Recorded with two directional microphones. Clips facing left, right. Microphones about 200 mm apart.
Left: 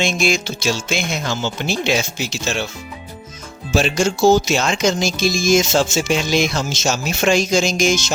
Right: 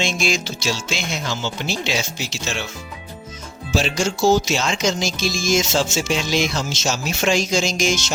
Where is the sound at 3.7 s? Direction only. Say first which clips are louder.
Left 4 dB; 55° left (ahead or behind).